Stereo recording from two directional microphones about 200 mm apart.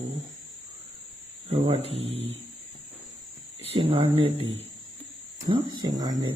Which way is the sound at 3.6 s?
25° right (ahead or behind).